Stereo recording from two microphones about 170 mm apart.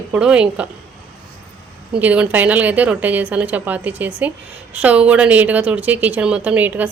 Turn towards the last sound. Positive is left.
turn(degrees=-10)  # may be behind; listen again after turning